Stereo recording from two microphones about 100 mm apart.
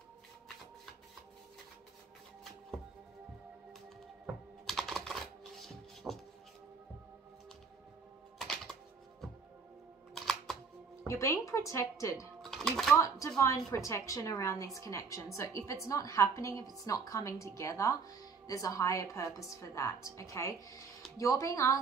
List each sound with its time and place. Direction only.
4.6 s typing: 5° left (ahead or behind)
8.4 s music: 5° left (ahead or behind)
10.1 s music: 5° left (ahead or behind)
11.1 s a woman's voice: 30° left (ahead or behind)
12.4 s music: centre (ahead or behind)
12.9 s a woman's voice: 30° left (ahead or behind)